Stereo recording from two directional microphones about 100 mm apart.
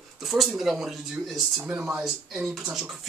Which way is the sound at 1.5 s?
20° right (ahead or behind).